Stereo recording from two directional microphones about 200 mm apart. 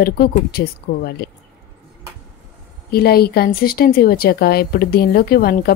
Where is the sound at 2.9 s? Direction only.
50° left (ahead or behind).